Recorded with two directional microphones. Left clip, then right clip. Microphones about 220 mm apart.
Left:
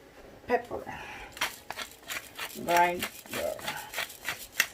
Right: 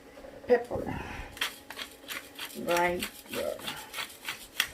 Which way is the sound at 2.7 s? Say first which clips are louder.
Left 3 dB; 30° left (ahead or behind).